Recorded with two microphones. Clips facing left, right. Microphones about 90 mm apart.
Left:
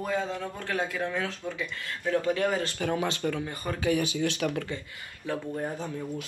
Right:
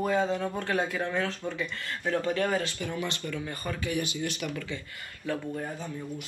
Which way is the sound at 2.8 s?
80° left.